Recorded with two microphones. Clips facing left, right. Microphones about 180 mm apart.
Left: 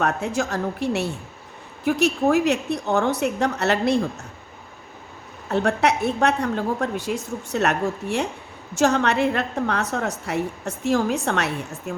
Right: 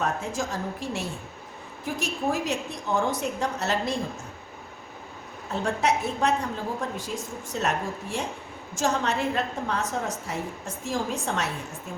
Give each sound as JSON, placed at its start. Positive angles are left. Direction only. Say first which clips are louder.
{"t": 0.0, "sound": "a woman's voice", "louder": "left 5 dB", "side_deg": 70}
{"t": 5.5, "sound": "a woman's voice", "louder": "left 5 dB", "side_deg": 70}